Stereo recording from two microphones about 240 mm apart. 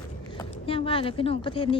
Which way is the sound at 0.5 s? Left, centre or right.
Left.